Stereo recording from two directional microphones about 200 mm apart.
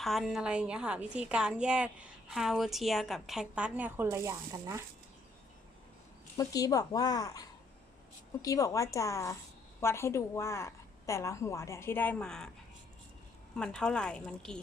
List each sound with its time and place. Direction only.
0.0 s a woman's voice: centre (ahead or behind)
6.3 s a woman's voice: 20° left (ahead or behind)
13.6 s a woman's voice: 5° left (ahead or behind)